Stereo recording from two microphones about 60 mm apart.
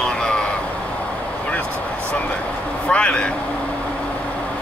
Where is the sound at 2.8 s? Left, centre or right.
Centre.